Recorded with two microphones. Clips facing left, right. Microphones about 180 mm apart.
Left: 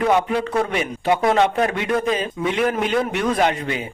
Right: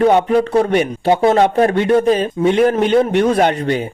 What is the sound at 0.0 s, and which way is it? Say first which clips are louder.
Speech: right 6 dB; 30° right (ahead or behind).